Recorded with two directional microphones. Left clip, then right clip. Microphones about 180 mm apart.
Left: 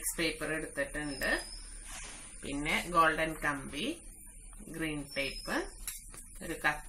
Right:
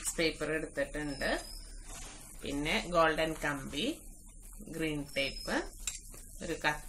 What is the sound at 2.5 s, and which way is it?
Speech, 10° right (ahead or behind).